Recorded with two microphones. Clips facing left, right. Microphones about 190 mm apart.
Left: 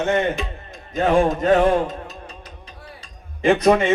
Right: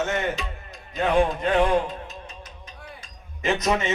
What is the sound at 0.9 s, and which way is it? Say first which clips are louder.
Music: left 4 dB; 45° left (ahead or behind).